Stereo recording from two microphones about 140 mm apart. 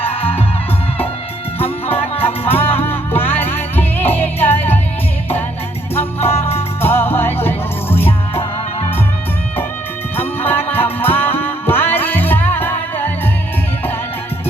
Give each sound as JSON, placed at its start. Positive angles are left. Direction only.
{"t": 0.1, "sound": "music", "side_deg": 40}
{"t": 1.5, "sound": "music", "side_deg": 40}
{"t": 2.2, "sound": "music", "side_deg": 15}
{"t": 5.9, "sound": "music", "side_deg": 15}
{"t": 10.2, "sound": "music", "side_deg": 15}